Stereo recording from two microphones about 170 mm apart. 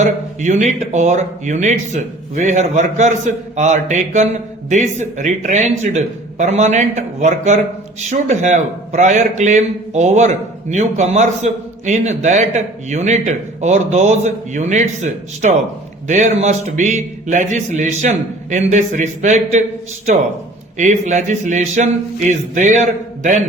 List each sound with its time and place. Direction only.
0.0 s a sound: 45° right (ahead or behind)
0.9 s a man's voice: 45° right (ahead or behind)
20.7 s a man's voice: 45° right (ahead or behind)